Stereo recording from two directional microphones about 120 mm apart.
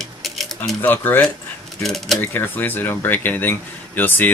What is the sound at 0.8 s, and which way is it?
Speech, 15° left (ahead or behind).